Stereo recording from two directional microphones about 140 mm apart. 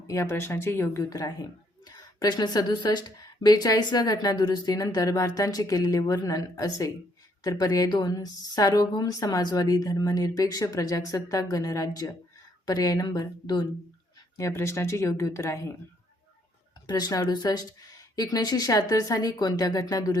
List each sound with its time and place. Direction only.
0.1 s a woman's voice: 20° left (ahead or behind)
16.8 s a woman's voice: 30° left (ahead or behind)